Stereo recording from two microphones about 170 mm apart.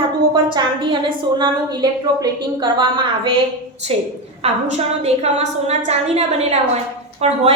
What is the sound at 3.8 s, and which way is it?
A woman's voice, 40° right (ahead or behind).